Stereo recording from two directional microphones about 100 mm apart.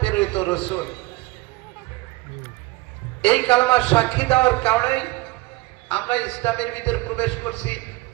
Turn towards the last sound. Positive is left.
turn(degrees=15)  # may be behind; listen again after turning